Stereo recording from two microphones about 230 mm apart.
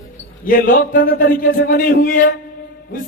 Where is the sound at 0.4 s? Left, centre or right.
Left.